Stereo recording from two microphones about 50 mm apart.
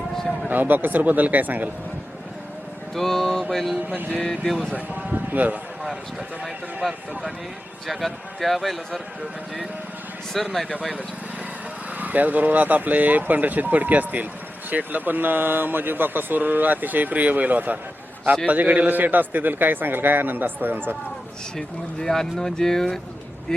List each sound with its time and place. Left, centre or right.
0.4 s speech: right
2.9 s speech: centre
3.8 s speech: right
4.2 s speech: centre
4.7 s speech: right
7.9 s speech: centre
10.3 s speech: centre
11.9 s speech: right
22.0 s speech: centre